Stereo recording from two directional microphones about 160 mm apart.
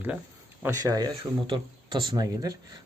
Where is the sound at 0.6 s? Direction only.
20° right (ahead or behind).